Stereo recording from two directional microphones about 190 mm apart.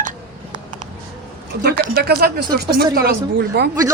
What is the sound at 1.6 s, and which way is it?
Speech, 55° right (ahead or behind).